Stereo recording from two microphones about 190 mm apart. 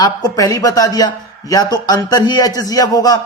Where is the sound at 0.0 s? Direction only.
20° left (ahead or behind).